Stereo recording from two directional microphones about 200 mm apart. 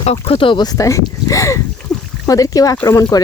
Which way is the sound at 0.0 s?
30° left (ahead or behind).